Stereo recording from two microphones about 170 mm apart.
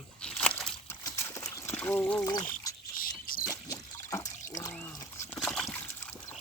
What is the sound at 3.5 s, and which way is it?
Pour, 20° left (ahead or behind).